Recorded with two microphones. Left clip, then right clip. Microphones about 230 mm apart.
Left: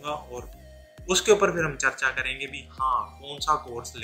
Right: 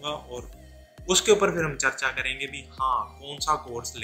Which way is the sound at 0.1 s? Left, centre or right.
Centre.